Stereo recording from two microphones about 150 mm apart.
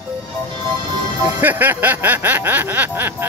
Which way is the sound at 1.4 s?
10° right (ahead or behind).